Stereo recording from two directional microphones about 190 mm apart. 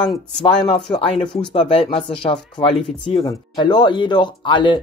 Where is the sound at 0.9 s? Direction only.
25° left (ahead or behind).